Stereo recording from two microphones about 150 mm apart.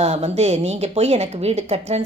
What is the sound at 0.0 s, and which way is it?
Speech, 45° right (ahead or behind).